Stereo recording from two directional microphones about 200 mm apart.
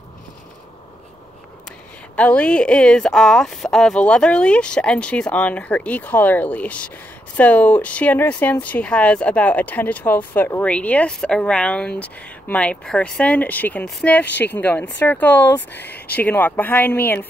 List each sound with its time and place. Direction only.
2.1 s speech: 5° left (ahead or behind)
14.2 s speech: 60° left (ahead or behind)
14.5 s speech: 10° left (ahead or behind)